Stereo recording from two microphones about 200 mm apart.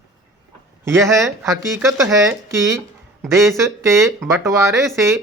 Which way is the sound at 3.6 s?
15° right (ahead or behind).